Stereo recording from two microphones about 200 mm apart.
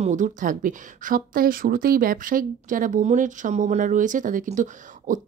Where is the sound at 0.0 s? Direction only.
40° right (ahead or behind).